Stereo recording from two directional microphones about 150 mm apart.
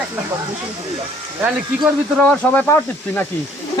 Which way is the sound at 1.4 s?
10° right (ahead or behind).